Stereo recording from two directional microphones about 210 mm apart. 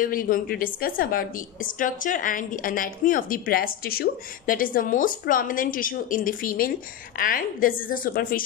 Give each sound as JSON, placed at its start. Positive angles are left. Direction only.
{"t": 0.0, "sound": "a woman's voice", "side_deg": 40}